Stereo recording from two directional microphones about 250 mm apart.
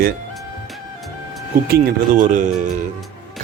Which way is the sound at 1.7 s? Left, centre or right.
Right.